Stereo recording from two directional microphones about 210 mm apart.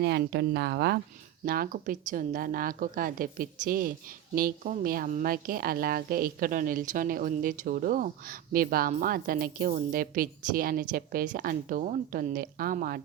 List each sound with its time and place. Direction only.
0.0 s a woman's voice: 55° right (ahead or behind)
1.5 s a woman's voice: 40° right (ahead or behind)